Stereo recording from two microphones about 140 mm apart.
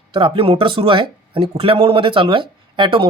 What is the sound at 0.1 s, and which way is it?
A man's voice, 40° right (ahead or behind).